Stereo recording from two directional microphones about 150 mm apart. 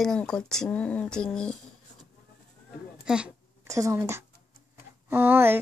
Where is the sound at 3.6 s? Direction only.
20° right (ahead or behind).